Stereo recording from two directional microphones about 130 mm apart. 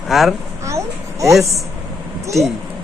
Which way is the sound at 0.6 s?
25° right (ahead or behind).